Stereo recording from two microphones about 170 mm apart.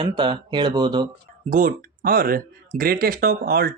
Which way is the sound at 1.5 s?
55° right (ahead or behind).